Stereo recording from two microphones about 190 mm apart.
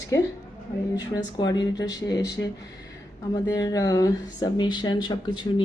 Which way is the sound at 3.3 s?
20° left (ahead or behind).